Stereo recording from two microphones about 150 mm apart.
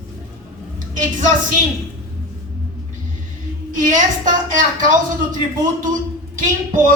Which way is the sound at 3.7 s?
60° right (ahead or behind).